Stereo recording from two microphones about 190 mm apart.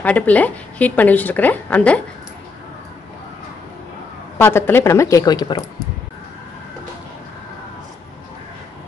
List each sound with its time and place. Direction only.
0.0 s a woman's voice: 10° left (ahead or behind)
4.4 s a woman's voice: 10° left (ahead or behind)